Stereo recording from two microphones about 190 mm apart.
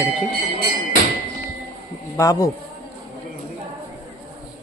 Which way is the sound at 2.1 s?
20° left (ahead or behind).